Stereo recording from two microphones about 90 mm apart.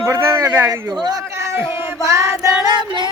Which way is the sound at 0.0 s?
35° right (ahead or behind).